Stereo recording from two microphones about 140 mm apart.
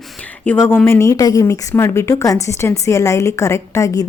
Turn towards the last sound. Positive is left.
turn(degrees=25)  # may be behind; listen again after turning